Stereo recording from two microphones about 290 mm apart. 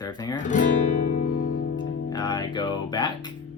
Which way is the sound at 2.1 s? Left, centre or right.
Centre.